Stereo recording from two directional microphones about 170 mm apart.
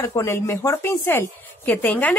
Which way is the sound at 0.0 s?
15° left (ahead or behind).